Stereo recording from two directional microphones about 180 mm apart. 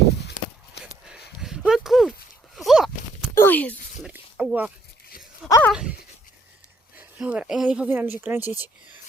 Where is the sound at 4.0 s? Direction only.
5° right (ahead or behind).